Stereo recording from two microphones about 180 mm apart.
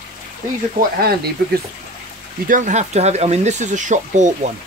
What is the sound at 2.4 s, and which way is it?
Speech, 45° right (ahead or behind).